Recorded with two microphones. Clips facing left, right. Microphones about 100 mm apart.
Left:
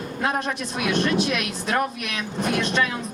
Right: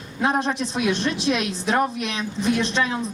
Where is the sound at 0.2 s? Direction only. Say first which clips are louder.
Right 4 dB; 25° right (ahead or behind).